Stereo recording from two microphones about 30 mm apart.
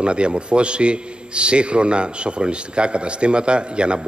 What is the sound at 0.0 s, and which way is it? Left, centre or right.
A man's voice, right.